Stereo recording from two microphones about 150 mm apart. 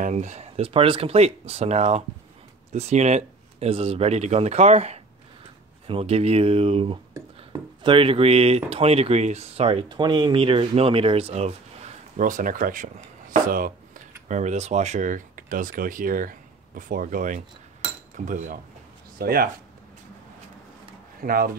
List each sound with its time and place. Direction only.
0.0 s speech: 50° right (ahead or behind)
7.2 s speech: 30° right (ahead or behind)
12.2 s speech: 60° right (ahead or behind)
13.3 s a sound: 65° right (ahead or behind)
14.2 s speech: 50° right (ahead or behind)
19.1 s speech: 80° right
21.2 s speech: 75° right (ahead or behind)